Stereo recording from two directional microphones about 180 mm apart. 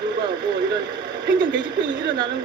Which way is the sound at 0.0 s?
25° right (ahead or behind).